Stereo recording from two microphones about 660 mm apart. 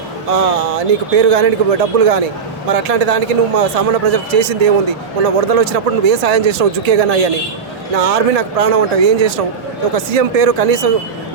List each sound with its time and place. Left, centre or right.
0.3 s speech: right